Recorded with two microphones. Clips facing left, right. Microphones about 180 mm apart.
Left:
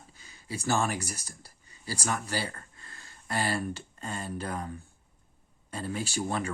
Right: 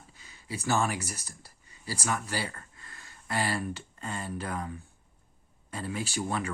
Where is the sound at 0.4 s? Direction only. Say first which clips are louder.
Left 1 dB; 30° left (ahead or behind).